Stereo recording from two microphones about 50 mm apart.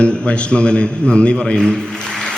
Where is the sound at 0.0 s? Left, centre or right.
Left.